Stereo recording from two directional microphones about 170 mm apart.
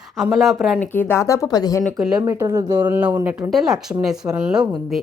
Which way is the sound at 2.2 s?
20° right (ahead or behind).